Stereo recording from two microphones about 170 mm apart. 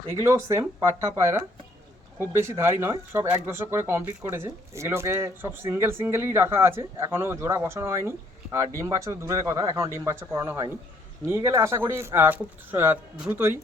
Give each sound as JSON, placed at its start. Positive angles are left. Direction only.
{"t": 0.2, "sound": "speech", "side_deg": -20}